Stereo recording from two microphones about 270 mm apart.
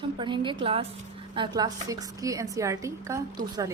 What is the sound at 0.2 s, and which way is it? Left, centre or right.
A woman's voice, centre.